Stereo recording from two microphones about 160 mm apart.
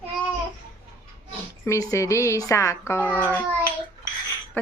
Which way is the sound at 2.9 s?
10° left (ahead or behind).